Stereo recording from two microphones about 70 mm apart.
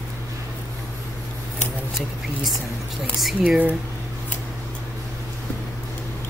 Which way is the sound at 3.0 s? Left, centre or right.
Centre.